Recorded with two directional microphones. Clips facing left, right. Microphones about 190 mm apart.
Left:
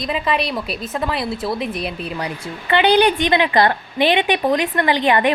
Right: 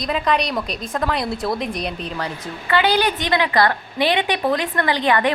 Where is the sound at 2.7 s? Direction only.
20° left (ahead or behind).